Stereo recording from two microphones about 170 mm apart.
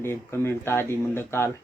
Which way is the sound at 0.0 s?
15° left (ahead or behind).